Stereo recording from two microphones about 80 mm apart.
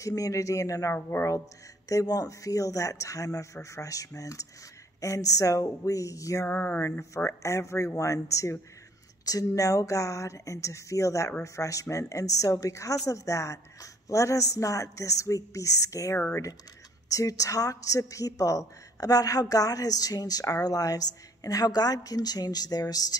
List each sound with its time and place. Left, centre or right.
0.0 s a woman's voice: left
6.4 s a sound: left
7.2 s a woman's voice: left